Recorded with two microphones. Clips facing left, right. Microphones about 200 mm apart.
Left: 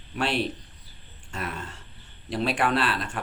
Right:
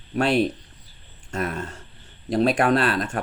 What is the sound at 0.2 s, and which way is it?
Speech, 45° right (ahead or behind).